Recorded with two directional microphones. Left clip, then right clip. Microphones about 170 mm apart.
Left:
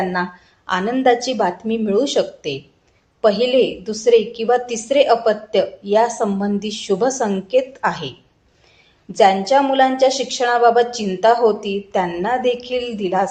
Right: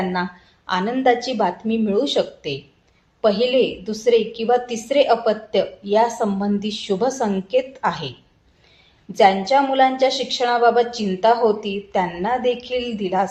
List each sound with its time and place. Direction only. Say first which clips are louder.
0.7 s a woman's voice: left 2 dB; 40° left (ahead or behind)
9.1 s a woman's voice: left 2 dB; 40° left (ahead or behind)